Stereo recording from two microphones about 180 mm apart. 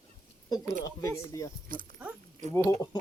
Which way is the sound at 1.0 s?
20° left (ahead or behind).